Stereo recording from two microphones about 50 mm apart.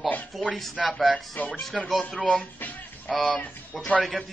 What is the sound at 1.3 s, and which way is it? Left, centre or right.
Speech, left.